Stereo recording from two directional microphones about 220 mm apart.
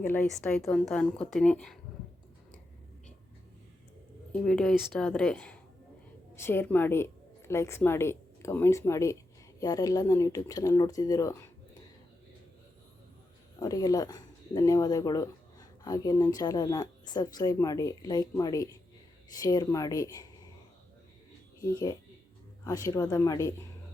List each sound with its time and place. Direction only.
0.0 s a woman's voice: 10° left (ahead or behind)
4.3 s a woman's voice: 5° left (ahead or behind)
13.6 s speech: 15° left (ahead or behind)
21.6 s speech: 15° left (ahead or behind)